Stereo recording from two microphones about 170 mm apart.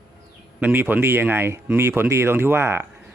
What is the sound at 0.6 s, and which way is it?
Speech, 10° right (ahead or behind).